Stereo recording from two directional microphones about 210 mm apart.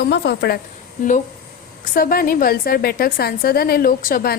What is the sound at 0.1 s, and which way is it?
Speech, 50° left (ahead or behind).